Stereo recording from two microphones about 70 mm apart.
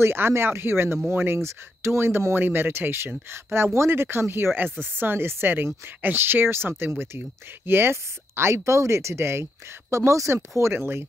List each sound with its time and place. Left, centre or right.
0.0 s speech: right